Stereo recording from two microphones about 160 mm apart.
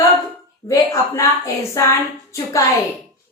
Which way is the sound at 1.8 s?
20° left (ahead or behind).